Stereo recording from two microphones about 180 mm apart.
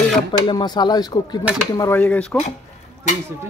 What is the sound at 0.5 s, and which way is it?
Speech, 25° left (ahead or behind).